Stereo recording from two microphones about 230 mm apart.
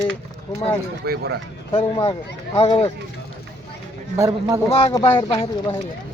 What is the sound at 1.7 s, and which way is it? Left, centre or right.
Speech, left.